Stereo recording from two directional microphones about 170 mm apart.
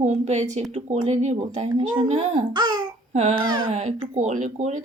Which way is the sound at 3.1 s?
40° right (ahead or behind).